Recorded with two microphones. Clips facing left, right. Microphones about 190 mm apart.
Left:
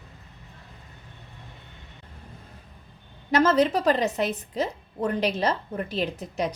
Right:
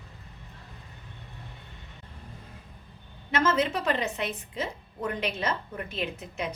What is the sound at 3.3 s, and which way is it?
A woman's voice, 35° left (ahead or behind).